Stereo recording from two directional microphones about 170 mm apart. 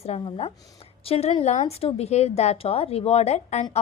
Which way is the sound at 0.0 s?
35° left (ahead or behind).